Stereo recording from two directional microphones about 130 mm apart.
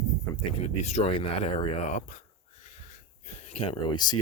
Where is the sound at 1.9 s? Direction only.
70° left (ahead or behind).